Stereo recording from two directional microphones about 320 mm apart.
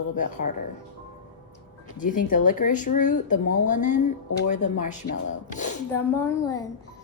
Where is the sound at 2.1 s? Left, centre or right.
Left.